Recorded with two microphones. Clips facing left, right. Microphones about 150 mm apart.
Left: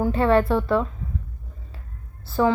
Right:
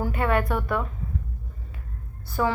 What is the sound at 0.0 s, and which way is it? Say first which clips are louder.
Speech: left 6 dB; 25° left (ahead or behind).